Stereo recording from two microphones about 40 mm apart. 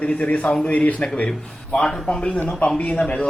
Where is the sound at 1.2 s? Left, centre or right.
Left.